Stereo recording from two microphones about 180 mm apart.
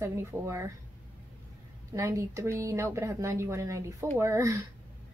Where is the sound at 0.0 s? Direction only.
15° right (ahead or behind).